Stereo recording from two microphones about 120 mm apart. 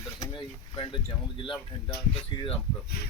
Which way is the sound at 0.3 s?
40° left (ahead or behind).